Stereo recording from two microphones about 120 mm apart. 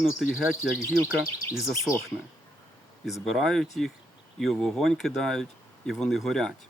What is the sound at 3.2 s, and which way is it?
Speech, 5° left (ahead or behind).